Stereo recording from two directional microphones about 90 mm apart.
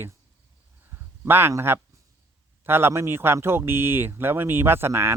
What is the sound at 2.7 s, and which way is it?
Speech, 25° right (ahead or behind).